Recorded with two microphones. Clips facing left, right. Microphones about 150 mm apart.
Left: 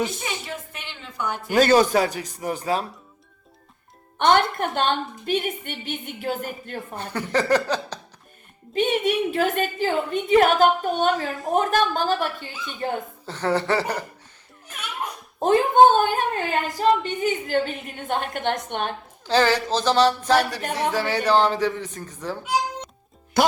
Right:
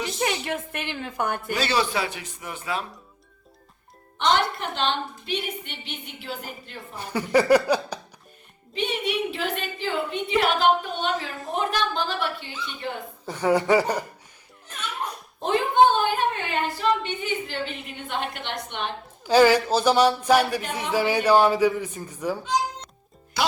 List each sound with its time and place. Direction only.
0.4 s a woman's voice: 55° right (ahead or behind)
1.5 s a man's voice: 45° left (ahead or behind)
4.2 s a woman's voice: 55° left (ahead or behind)
7.0 s speech: 10° right (ahead or behind)
8.7 s a woman's voice: 45° left (ahead or behind)
13.2 s speech: 10° right (ahead or behind)
14.7 s a sound: 10° left (ahead or behind)
15.4 s a woman's voice: 45° left (ahead or behind)
19.2 s speech: 10° right (ahead or behind)